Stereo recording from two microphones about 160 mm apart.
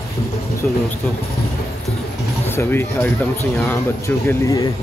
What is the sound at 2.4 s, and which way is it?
Speech, 15° left (ahead or behind).